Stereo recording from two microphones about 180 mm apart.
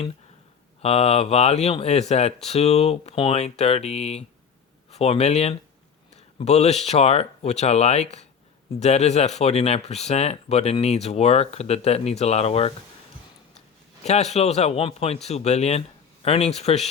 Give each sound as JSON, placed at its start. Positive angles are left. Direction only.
{"t": 0.8, "sound": "speech", "side_deg": 35}
{"t": 14.0, "sound": "speech", "side_deg": 40}